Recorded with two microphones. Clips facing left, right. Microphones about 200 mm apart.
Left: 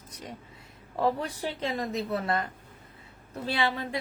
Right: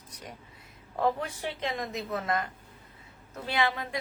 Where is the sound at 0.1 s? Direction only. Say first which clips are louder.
Left 3 dB; 25° left (ahead or behind).